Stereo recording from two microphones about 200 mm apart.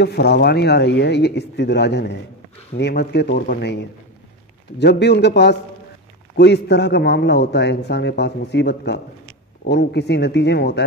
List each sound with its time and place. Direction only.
0.0 s a man's voice: 55° left (ahead or behind)